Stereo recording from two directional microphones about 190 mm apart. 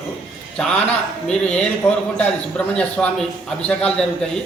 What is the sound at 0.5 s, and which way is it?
Speech, 5° left (ahead or behind).